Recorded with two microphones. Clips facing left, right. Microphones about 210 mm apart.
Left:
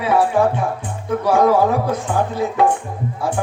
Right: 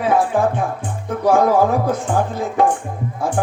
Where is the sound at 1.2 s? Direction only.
45° right (ahead or behind).